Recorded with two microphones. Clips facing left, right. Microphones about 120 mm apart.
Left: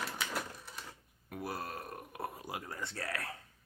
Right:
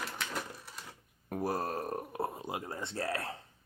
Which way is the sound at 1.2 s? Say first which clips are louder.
Right 7 dB; 40° right (ahead or behind).